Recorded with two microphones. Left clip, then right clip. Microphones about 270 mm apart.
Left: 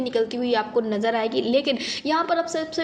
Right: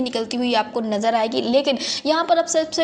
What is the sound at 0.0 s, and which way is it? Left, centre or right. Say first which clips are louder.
A woman's voice: even; right.